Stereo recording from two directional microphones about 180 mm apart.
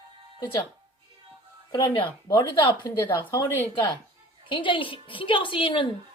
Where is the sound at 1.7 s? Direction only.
25° left (ahead or behind).